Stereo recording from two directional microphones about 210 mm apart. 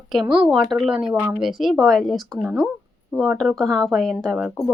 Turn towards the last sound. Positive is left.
turn(degrees=0)  # may be behind; listen again after turning